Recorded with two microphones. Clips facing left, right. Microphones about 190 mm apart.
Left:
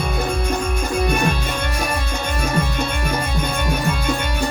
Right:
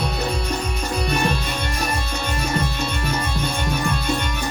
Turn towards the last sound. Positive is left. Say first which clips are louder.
# left 2 dB
turn(degrees=50)  # may be behind; listen again after turning